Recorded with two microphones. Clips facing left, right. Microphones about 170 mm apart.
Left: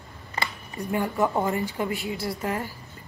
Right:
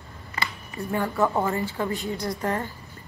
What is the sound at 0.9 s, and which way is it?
A woman's voice, 15° left (ahead or behind).